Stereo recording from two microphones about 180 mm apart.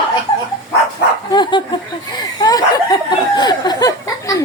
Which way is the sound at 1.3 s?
25° left (ahead or behind).